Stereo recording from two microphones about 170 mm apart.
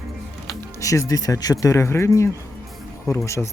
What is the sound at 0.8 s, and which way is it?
Speech, 20° left (ahead or behind).